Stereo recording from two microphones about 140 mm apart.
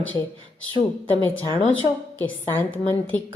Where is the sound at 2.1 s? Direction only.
15° left (ahead or behind).